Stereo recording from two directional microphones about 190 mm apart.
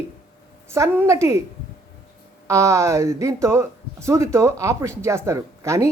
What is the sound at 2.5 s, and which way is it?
Speech, 15° right (ahead or behind).